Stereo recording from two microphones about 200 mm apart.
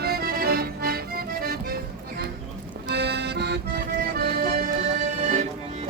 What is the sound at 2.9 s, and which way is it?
Accordion, 55° right (ahead or behind).